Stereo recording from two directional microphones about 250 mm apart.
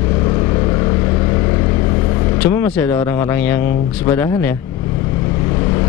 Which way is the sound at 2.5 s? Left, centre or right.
Centre.